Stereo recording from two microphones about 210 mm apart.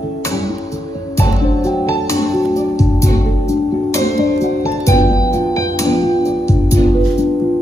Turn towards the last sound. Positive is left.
turn(degrees=15)  # may be behind; listen again after turning